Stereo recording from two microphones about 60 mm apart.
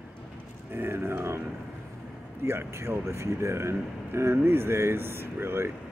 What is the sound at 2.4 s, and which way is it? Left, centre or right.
Speech, right.